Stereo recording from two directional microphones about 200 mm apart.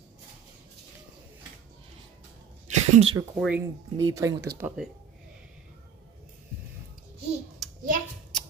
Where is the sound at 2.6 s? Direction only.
35° right (ahead or behind).